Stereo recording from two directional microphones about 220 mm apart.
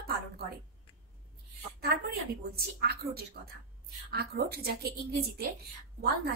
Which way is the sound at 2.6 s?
45° right (ahead or behind).